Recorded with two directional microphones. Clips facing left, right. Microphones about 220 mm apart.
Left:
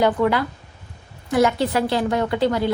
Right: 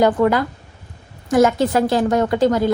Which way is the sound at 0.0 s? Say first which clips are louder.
Right 3 dB; 45° right (ahead or behind).